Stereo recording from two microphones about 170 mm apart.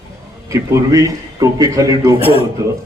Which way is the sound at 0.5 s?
20° right (ahead or behind).